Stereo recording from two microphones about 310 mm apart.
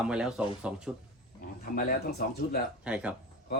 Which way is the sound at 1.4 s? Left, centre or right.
Left.